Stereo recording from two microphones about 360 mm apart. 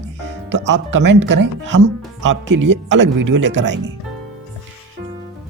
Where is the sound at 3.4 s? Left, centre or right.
Right.